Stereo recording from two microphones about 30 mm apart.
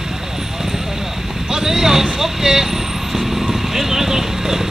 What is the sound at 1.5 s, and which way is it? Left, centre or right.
Vehicle, centre.